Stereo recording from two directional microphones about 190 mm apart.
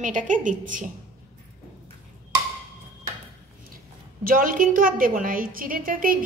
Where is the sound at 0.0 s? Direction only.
40° right (ahead or behind).